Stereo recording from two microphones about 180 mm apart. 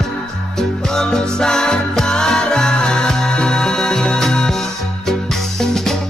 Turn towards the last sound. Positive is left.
turn(degrees=0)  # may be behind; listen again after turning